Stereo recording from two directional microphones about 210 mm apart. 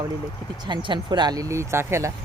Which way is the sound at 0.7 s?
20° right (ahead or behind).